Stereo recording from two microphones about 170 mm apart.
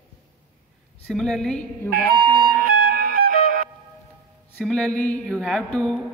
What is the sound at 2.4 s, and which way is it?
Music, 60° right (ahead or behind).